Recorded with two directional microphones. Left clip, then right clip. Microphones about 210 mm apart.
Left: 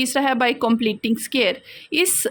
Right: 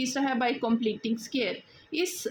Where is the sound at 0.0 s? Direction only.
40° left (ahead or behind).